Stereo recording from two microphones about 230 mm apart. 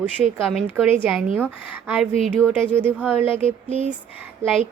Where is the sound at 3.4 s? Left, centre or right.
Right.